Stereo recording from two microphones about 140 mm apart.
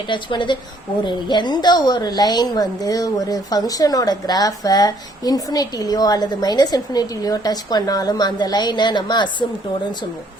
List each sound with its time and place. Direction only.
0.1 s a woman's voice: 35° left (ahead or behind)